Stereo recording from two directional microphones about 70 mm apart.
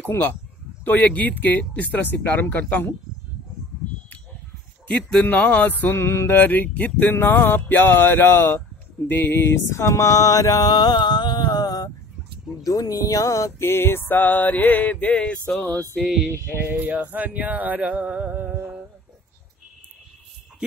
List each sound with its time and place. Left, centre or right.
0.1 s speech: left
0.8 s speech: left
4.8 s speech: centre
5.9 s speech: left
12.6 s speech: left
13.6 s speech: left; by 15.5 s centre
15.5 s music: centre
16.0 s a sound: centre
16.6 s music: right